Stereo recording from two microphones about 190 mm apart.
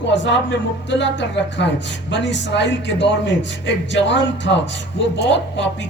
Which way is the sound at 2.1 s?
70° left (ahead or behind).